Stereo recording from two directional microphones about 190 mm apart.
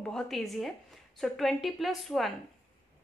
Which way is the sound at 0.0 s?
Centre (ahead or behind).